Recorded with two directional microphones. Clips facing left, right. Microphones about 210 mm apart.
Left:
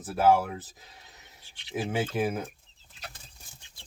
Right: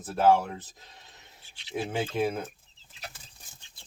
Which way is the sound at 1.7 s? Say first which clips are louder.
Left 1 dB; 5° left (ahead or behind).